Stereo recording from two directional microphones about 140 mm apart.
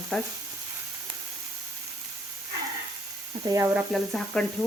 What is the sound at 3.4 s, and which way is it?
Speech, 20° right (ahead or behind).